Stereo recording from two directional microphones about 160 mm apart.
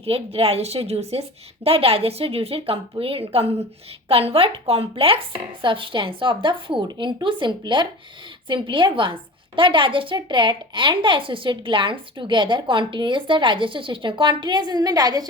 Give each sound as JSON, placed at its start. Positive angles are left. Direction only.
{"t": 0.0, "sound": "a woman's voice", "side_deg": -40}